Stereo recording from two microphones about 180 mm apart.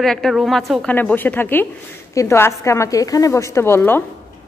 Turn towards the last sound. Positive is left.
turn(degrees=10)  # may be behind; listen again after turning